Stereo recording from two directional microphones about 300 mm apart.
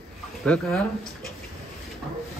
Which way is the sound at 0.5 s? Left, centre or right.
Centre.